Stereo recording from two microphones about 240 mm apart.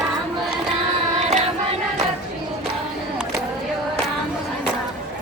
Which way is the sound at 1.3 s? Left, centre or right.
Right.